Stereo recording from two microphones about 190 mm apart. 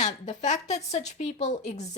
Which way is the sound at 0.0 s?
40° left (ahead or behind).